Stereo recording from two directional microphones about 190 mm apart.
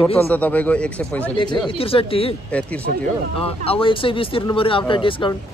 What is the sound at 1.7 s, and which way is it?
Speech, 30° left (ahead or behind).